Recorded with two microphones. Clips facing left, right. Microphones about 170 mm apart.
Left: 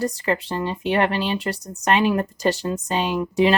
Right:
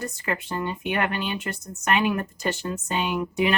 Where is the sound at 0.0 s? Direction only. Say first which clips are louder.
Left 7 dB; 30° left (ahead or behind).